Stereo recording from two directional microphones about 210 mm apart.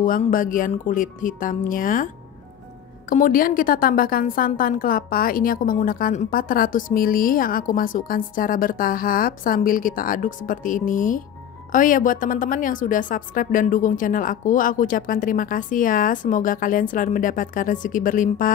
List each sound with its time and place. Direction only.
0.0 s a woman's voice: 40° left (ahead or behind)
3.1 s a woman's voice: 40° left (ahead or behind)